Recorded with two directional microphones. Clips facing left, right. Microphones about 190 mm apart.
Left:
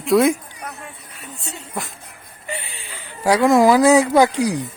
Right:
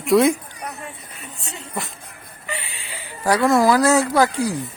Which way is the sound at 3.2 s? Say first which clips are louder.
Left 3 dB; 15° left (ahead or behind).